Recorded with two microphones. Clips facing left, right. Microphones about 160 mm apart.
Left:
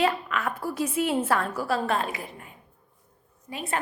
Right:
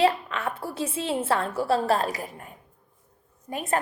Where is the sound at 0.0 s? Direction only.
30° right (ahead or behind).